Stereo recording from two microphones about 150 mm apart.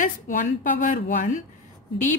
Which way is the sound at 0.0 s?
60° left (ahead or behind).